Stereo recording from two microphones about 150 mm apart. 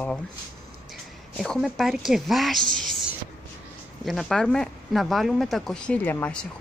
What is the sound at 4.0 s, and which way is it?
Speech, centre (ahead or behind).